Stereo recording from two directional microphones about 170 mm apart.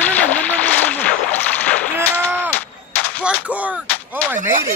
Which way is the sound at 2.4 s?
10° left (ahead or behind).